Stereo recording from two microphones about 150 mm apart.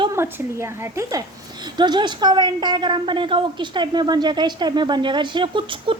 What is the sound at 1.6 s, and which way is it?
A woman's voice, 30° right (ahead or behind).